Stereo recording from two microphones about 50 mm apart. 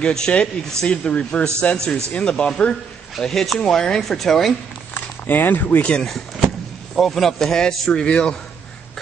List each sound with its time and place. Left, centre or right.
0.0 s a man's voice: centre
3.2 s a man's voice: centre
4.9 s a sound: left
5.8 s a man's voice: left
7.0 s a man's voice: centre